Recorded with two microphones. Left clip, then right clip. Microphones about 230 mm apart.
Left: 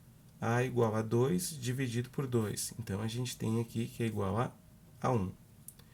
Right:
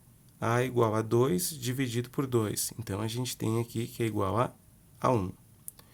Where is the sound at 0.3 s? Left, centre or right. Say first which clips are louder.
Right 4 dB; right.